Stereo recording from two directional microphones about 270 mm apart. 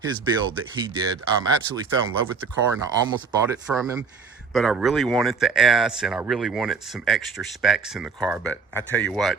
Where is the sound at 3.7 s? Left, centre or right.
Centre.